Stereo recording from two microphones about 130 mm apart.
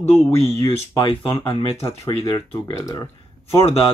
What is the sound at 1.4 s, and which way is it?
Speech, 45° left (ahead or behind).